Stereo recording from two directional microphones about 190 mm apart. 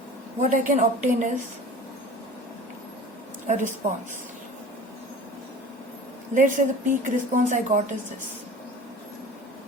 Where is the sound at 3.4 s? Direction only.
40° right (ahead or behind).